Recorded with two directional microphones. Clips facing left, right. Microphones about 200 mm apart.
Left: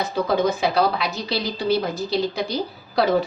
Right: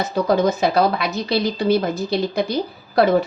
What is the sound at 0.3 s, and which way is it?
A woman's voice, 45° right (ahead or behind).